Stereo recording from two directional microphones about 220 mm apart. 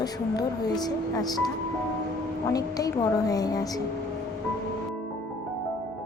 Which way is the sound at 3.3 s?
15° left (ahead or behind).